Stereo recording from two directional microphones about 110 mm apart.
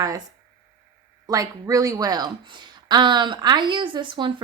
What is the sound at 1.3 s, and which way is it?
Speech, 30° right (ahead or behind).